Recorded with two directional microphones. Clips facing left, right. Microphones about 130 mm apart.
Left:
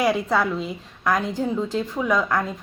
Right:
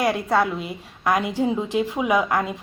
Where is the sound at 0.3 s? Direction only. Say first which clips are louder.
Right 1 dB; 5° right (ahead or behind).